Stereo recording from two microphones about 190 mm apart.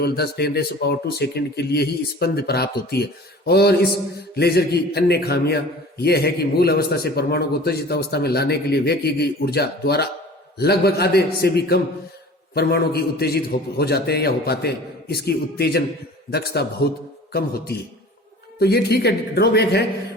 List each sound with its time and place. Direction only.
0.0 s a man's voice: 60° left (ahead or behind)